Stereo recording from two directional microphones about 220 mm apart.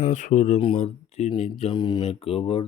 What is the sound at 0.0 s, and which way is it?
Speech, 35° left (ahead or behind).